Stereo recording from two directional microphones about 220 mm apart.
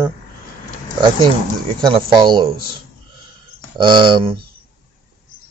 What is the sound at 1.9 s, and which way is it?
Speech, 20° right (ahead or behind).